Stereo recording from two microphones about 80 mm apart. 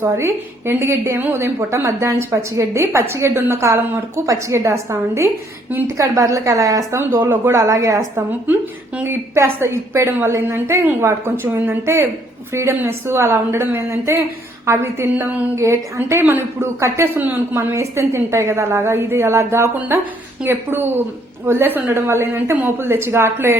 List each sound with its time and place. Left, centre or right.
0.0 s a woman's voice: right
7.0 s a woman's voice: right
7.5 s a woman's voice: right
8.1 s a woman's voice: right
11.4 s a woman's voice: right
17.2 s a woman's voice: centre
17.5 s a woman's voice: right